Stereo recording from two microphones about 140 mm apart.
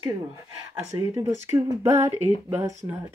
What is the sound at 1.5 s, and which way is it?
Female singing, 20° right (ahead or behind).